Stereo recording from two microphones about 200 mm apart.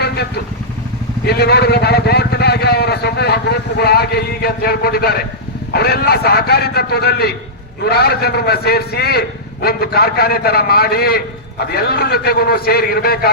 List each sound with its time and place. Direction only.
1.2 s speech: 55° left (ahead or behind)